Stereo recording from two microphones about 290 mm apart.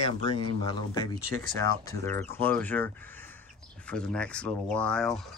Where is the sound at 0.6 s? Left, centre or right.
Centre.